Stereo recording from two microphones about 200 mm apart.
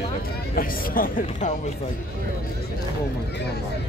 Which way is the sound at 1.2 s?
35° left (ahead or behind).